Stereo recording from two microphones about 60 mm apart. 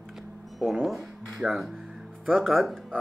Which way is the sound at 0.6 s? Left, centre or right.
Centre.